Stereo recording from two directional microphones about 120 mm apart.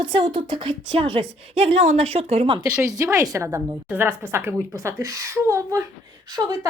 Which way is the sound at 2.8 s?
25° right (ahead or behind).